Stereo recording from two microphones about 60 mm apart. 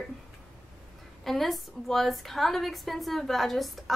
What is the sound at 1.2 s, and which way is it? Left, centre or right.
A woman's voice, centre.